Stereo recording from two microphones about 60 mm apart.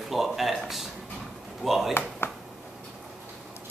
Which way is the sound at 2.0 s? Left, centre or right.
Left.